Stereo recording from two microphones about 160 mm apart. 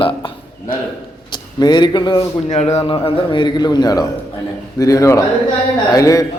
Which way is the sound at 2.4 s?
45° left (ahead or behind).